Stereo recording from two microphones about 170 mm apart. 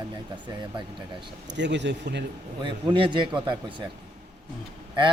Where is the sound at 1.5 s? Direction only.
90° right.